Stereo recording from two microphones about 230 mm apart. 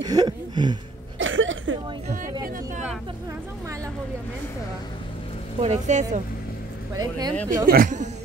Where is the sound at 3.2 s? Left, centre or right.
Centre.